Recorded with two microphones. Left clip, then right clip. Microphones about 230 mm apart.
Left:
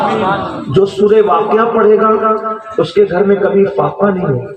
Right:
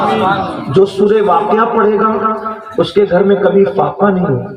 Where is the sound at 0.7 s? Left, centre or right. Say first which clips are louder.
Even; right.